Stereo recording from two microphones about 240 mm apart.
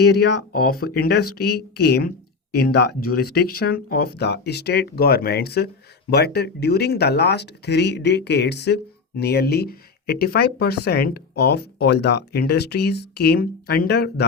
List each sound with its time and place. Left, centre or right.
0.0 s speech: left